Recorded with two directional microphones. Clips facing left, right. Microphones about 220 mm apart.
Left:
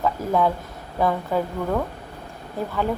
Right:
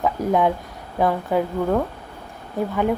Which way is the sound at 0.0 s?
20° right (ahead or behind).